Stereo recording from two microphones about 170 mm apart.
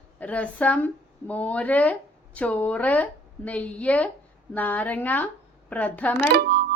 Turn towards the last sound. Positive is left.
turn(degrees=-70)  # may be behind; listen again after turning